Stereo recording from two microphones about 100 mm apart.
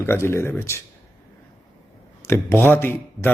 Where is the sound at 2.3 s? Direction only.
25° left (ahead or behind).